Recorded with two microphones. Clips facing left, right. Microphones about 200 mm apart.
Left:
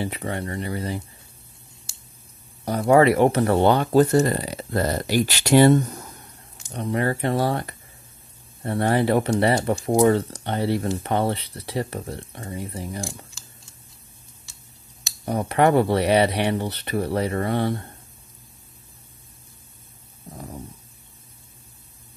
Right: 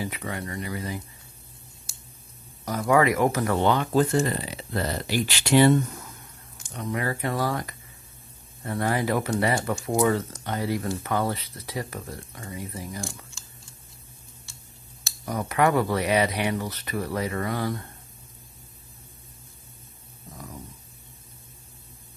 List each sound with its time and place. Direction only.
0.0 s speech: 30° left (ahead or behind)
2.6 s speech: 30° left (ahead or behind)
15.2 s speech: 30° left (ahead or behind)
20.2 s a sound: 30° left (ahead or behind)